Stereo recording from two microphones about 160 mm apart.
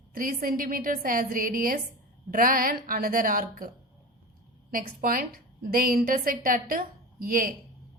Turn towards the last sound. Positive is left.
turn(degrees=-60)  # may be behind; listen again after turning